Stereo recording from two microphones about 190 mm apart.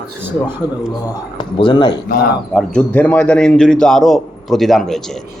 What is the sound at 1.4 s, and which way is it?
Speech, 25° left (ahead or behind).